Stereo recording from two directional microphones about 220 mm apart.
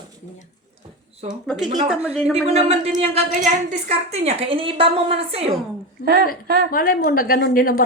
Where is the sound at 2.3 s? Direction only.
30° right (ahead or behind).